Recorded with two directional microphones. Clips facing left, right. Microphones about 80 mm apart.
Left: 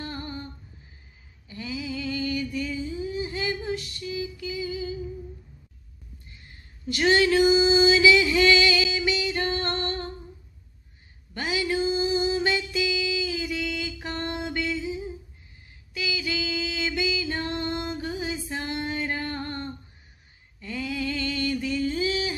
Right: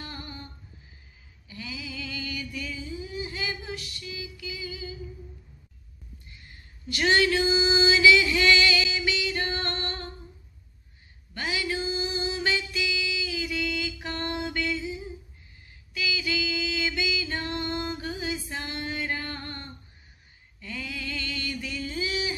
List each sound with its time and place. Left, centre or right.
0.0 s humming: left
1.5 s a sound: left
6.9 s female singing: left
11.3 s music: left
15.9 s music: left
20.6 s a sound: left